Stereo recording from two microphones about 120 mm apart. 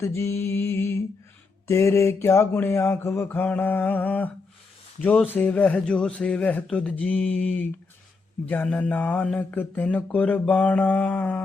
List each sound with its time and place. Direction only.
0.0 s mantra: 25° left (ahead or behind)
5.0 s speech: 15° left (ahead or behind)